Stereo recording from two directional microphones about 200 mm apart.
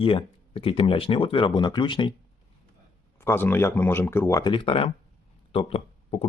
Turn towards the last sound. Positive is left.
turn(degrees=30)  # may be behind; listen again after turning